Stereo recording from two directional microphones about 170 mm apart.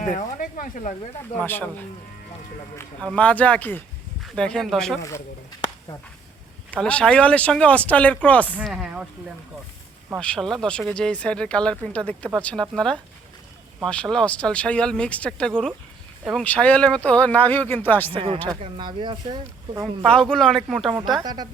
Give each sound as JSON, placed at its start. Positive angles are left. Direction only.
{"t": 0.0, "sound": "speech", "side_deg": 50}
{"t": 1.4, "sound": "speech", "side_deg": 10}
{"t": 6.8, "sound": "speech", "side_deg": 5}
{"t": 8.5, "sound": "speech", "side_deg": -5}
{"t": 10.2, "sound": "speech", "side_deg": 5}
{"t": 18.6, "sound": "speech", "side_deg": -30}
{"t": 20.1, "sound": "speech", "side_deg": 5}
{"t": 21.2, "sound": "speech", "side_deg": -25}